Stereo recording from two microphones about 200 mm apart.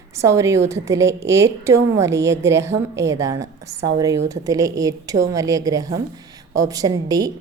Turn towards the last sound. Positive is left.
turn(degrees=-20)  # may be behind; listen again after turning